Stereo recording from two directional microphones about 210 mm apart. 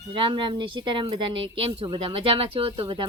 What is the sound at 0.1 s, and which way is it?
Speech, 25° right (ahead or behind).